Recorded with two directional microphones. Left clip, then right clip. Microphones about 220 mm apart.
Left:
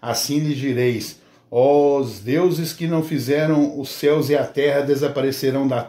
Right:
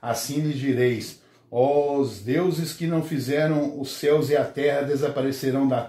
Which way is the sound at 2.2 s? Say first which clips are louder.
Left 5 dB; 50° left (ahead or behind).